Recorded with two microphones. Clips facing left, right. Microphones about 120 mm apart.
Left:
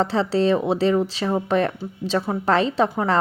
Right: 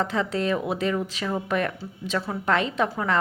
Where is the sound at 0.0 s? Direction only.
30° left (ahead or behind).